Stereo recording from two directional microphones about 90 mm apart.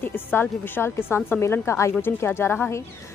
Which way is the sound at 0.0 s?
25° left (ahead or behind).